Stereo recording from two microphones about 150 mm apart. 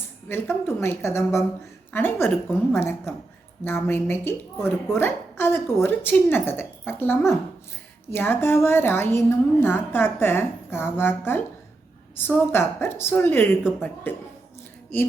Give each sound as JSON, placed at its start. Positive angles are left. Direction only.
{"t": 0.3, "sound": "a woman's voice", "side_deg": 15}